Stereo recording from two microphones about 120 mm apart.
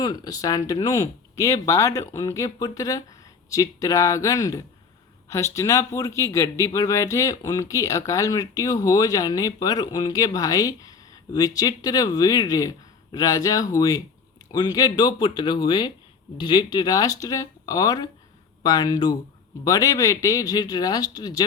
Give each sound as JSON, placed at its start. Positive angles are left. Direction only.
{"t": 0.0, "sound": "speech", "side_deg": 30}